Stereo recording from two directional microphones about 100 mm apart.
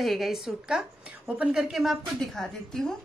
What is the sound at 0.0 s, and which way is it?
A woman's voice, centre (ahead or behind).